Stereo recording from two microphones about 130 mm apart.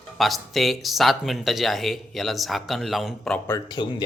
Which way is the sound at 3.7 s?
35° left (ahead or behind).